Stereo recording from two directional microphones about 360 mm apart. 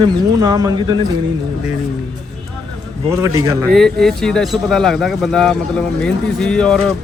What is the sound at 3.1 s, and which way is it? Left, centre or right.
Speech, centre.